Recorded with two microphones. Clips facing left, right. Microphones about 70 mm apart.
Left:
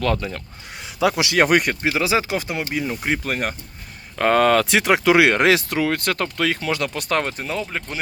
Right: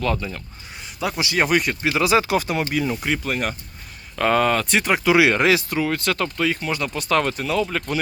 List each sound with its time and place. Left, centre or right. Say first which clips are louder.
0.0 s speech: left 2 dB; left
0.9 s speech: left 4 dB; left
1.8 s speech: right 2 dB; left
3.2 s speech: even; left
4.4 s speech: left 3 dB; left
6.3 s speech: left 1 dB; left
6.9 s speech: right 1 dB; left
7.2 s speech: right 3 dB; left
7.6 s speech: right 4 dB; centre